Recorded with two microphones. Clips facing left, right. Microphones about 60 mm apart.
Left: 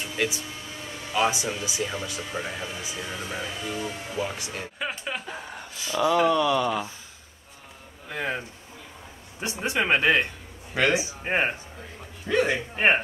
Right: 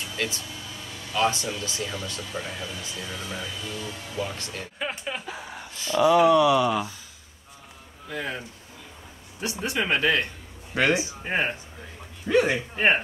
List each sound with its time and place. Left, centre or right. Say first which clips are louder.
0.1 s music: left 3 dB; centre
1.1 s speech: even; centre
4.7 s a sound: right 1 dB; centre
5.9 s speech: right 4 dB; centre
8.1 s speech: left 2 dB; left
12.3 s speech: right 2 dB; centre
12.7 s speech: left 1 dB; centre